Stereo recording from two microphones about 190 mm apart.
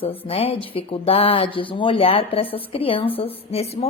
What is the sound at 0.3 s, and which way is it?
Speech, 30° left (ahead or behind).